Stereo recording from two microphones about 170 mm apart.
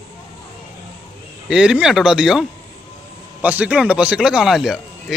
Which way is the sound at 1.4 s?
5° right (ahead or behind).